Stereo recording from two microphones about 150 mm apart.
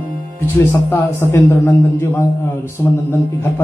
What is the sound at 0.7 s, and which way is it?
A man's voice, 15° left (ahead or behind).